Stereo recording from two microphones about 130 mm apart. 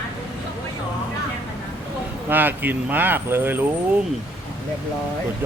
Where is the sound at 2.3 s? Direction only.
15° right (ahead or behind).